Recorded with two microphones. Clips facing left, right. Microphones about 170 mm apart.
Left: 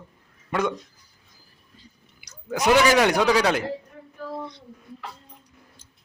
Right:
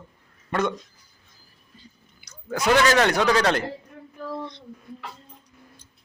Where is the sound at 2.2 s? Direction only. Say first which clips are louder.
Left 2 dB; 15° left (ahead or behind).